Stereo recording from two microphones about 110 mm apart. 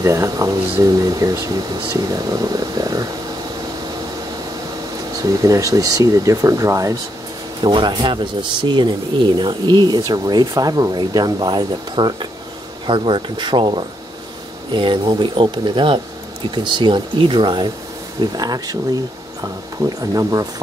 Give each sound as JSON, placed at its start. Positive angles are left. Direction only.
{"t": 0.0, "sound": "speech", "side_deg": -30}
{"t": 5.2, "sound": "speech", "side_deg": -30}
{"t": 7.6, "sound": "speech", "side_deg": -50}